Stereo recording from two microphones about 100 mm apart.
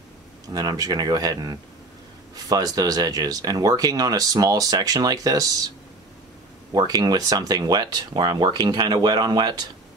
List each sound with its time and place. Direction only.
0.5 s speech: 40° right (ahead or behind)
6.7 s speech: 40° right (ahead or behind)